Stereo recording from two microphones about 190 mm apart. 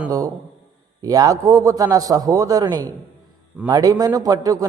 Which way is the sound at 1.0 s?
20° right (ahead or behind).